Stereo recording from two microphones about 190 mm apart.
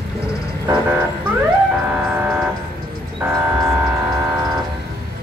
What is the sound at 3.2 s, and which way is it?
Vehicle, 15° right (ahead or behind).